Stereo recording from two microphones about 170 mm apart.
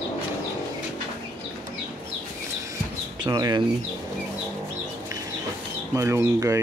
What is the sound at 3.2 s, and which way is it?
Speech, 25° right (ahead or behind).